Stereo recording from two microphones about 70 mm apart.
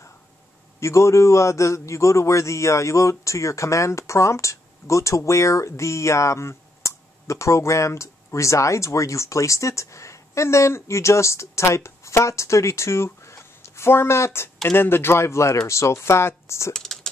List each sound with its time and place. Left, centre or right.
0.7 s a man's voice: left
16.7 s typing: centre